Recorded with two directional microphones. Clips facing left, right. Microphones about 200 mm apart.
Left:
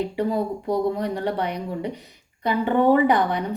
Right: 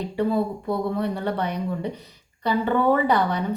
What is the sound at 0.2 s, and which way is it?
A woman's voice, 15° left (ahead or behind).